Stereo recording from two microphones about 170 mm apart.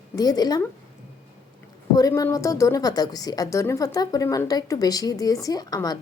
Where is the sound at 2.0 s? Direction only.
20° left (ahead or behind).